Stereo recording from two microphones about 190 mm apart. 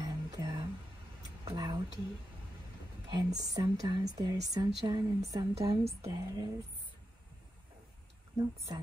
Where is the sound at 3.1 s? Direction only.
20° right (ahead or behind).